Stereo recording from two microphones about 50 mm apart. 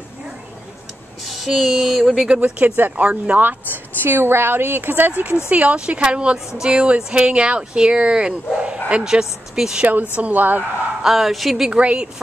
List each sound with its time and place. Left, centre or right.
1.2 s speech: centre
2.2 s speech: right
2.6 s speech: right
4.0 s speech: right
5.5 s speech: right
9.0 s speech: centre
10.1 s speech: right
11.0 s speech: centre
11.7 s speech: right